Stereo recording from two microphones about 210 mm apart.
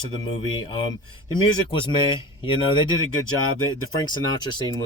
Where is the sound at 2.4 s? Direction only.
25° left (ahead or behind).